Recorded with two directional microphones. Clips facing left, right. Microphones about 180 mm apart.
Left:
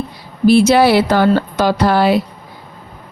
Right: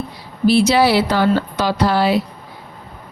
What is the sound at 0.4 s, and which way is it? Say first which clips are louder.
Speech: left 4 dB; 50° left (ahead or behind).